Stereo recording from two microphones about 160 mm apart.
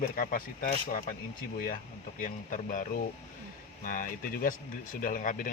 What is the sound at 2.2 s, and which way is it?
Speech, 55° left (ahead or behind).